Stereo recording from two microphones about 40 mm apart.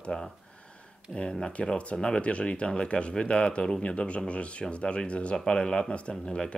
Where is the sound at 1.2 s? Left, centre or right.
Left.